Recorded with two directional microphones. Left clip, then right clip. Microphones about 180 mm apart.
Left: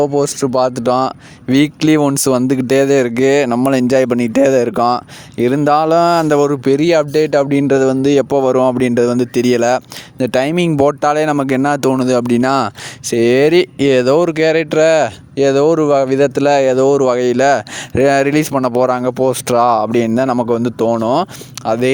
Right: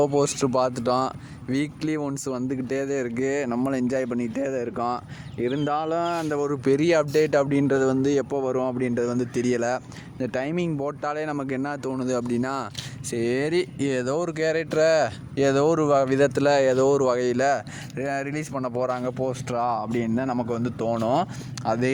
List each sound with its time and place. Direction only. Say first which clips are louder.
0.0 s speech: left 7 dB; 25° left (ahead or behind); by 6.6 s 55° left (ahead or behind)
6.7 s speech: left 9 dB; 35° left (ahead or behind)
15.4 s speech: left 9 dB; 30° left (ahead or behind); by 21.8 s 45° left (ahead or behind)